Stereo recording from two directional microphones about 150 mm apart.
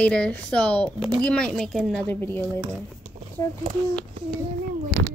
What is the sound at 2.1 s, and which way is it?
Speech, 15° left (ahead or behind).